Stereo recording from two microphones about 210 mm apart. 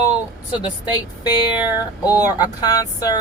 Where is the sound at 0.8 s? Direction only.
20° left (ahead or behind).